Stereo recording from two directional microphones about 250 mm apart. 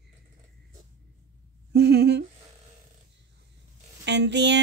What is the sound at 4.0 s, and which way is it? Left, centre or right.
Speech, right.